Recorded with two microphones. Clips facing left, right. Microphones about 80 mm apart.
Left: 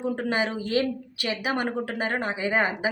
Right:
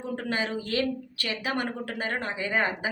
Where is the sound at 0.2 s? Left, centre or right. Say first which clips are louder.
Left 3 dB; centre.